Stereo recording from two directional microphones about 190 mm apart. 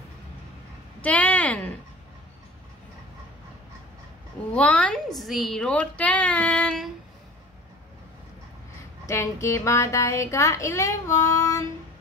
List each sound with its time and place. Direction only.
1.0 s speech: 10° left (ahead or behind)
4.6 s speech: 5° left (ahead or behind)
9.0 s speech: 15° left (ahead or behind)